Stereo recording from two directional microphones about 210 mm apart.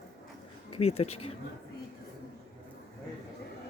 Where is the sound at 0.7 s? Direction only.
30° left (ahead or behind).